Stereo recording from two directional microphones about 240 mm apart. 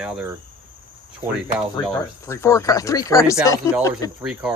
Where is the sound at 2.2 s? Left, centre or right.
Centre.